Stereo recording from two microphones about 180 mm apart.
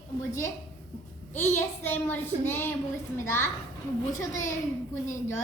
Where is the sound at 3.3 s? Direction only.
15° left (ahead or behind).